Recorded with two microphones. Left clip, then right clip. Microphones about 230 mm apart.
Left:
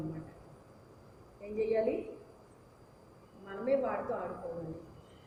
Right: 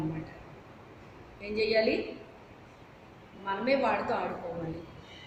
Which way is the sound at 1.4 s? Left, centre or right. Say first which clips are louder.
Right 4 dB; centre.